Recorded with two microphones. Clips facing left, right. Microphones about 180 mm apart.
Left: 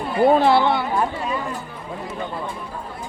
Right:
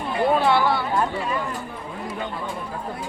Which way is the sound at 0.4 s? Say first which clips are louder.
Left 3 dB; 25° left (ahead or behind).